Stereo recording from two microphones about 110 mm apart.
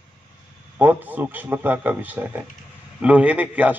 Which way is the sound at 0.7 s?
15° right (ahead or behind).